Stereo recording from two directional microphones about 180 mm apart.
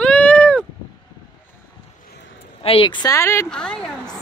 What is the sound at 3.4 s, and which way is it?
Speech, 5° left (ahead or behind).